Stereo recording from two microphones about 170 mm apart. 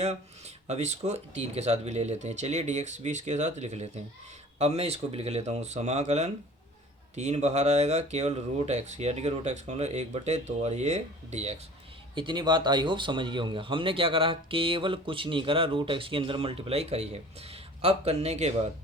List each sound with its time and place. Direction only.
0.0 s speech: 40° right (ahead or behind)
12.1 s speech: 25° right (ahead or behind)